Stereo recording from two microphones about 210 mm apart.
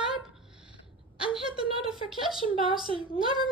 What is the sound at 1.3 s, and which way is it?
Speech, 5° right (ahead or behind).